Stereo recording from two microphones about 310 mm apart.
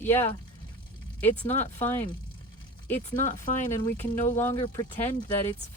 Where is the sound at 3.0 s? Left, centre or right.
Left.